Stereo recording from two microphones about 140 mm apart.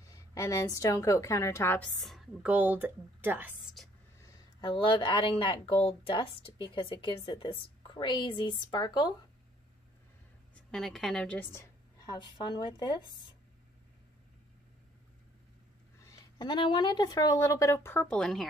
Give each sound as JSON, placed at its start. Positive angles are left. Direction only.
{"t": 0.0, "sound": "a woman's voice", "side_deg": 25}
{"t": 2.0, "sound": "speech", "side_deg": 0}
{"t": 3.6, "sound": "a woman's voice", "side_deg": 0}
{"t": 4.6, "sound": "a woman's voice", "side_deg": 35}
{"t": 10.7, "sound": "a woman's voice", "side_deg": 0}
{"t": 12.1, "sound": "a woman's voice", "side_deg": 30}
{"t": 16.0, "sound": "speech", "side_deg": 25}
{"t": 18.1, "sound": "speech", "side_deg": 5}